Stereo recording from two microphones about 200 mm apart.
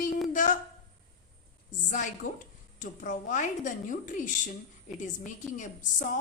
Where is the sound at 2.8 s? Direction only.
40° left (ahead or behind).